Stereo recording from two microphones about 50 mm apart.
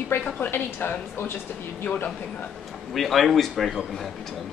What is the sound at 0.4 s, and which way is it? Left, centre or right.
Speech, left.